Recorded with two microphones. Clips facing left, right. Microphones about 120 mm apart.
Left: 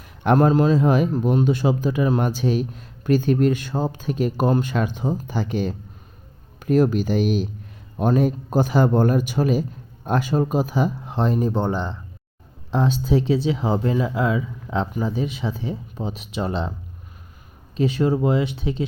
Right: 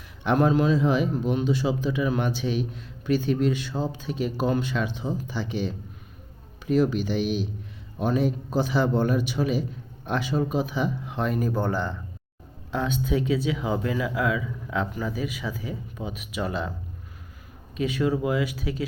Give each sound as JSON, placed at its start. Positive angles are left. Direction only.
{"t": 0.2, "sound": "a man's voice", "side_deg": 45}
{"t": 12.7, "sound": "speech", "side_deg": 30}
{"t": 17.7, "sound": "speech", "side_deg": 30}